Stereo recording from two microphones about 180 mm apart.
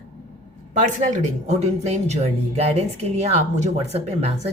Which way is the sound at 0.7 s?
40° right (ahead or behind).